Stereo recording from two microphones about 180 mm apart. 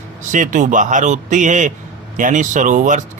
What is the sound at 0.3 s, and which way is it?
Speech, 45° right (ahead or behind).